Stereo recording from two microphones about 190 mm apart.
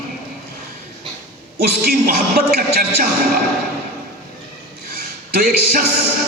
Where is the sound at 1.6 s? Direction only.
55° right (ahead or behind).